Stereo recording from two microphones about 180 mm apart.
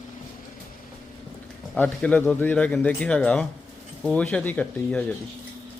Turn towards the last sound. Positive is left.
turn(degrees=10)  # may be behind; listen again after turning